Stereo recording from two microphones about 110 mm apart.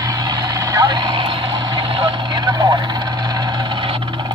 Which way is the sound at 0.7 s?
40° right (ahead or behind).